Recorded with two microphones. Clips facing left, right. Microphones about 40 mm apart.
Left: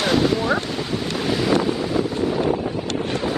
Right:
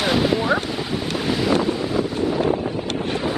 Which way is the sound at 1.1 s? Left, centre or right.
Centre.